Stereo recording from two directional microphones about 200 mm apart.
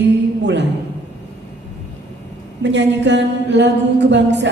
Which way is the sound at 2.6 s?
60° right (ahead or behind).